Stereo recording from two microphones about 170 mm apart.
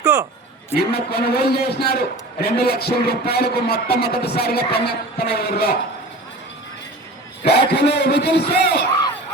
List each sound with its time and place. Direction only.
0.1 s speech: 15° right (ahead or behind)
0.8 s a man's voice: 70° left (ahead or behind)
7.4 s a man's voice: 75° left (ahead or behind)